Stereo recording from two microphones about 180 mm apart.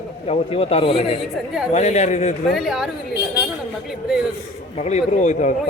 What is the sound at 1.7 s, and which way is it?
Speech, 40° left (ahead or behind).